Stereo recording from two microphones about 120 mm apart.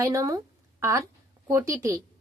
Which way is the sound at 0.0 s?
25° right (ahead or behind).